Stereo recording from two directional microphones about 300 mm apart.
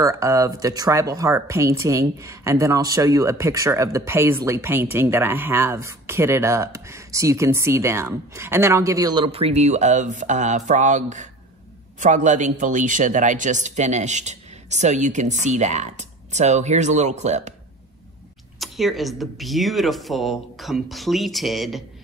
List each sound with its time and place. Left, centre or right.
0.0 s speech: centre
18.6 s speech: centre